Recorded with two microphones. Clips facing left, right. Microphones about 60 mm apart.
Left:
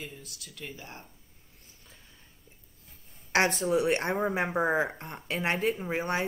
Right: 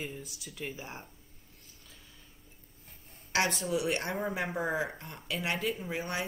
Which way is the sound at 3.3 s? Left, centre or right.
Left.